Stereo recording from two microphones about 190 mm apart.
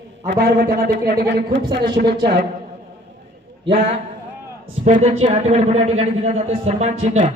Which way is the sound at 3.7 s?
30° right (ahead or behind).